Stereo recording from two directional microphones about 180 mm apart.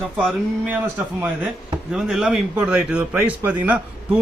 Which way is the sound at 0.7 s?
10° right (ahead or behind).